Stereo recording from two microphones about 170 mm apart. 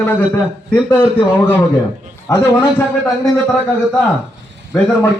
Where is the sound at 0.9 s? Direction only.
15° left (ahead or behind).